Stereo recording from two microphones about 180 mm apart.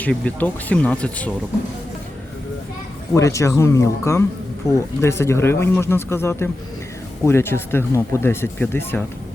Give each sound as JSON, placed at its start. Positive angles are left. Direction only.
{"t": 0.0, "sound": "speech", "side_deg": 10}
{"t": 3.2, "sound": "speech", "side_deg": 15}